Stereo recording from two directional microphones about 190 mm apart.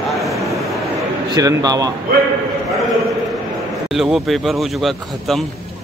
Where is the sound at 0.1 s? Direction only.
Centre (ahead or behind).